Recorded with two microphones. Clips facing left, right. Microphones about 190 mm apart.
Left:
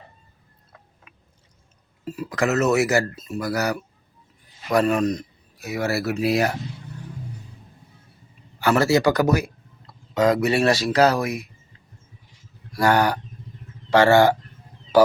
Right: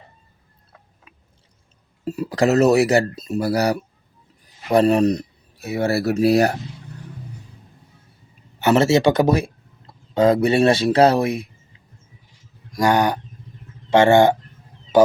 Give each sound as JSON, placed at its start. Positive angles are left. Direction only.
{"t": 2.0, "sound": "speech", "side_deg": -40}
{"t": 8.5, "sound": "speech", "side_deg": -25}
{"t": 12.7, "sound": "speech", "side_deg": -15}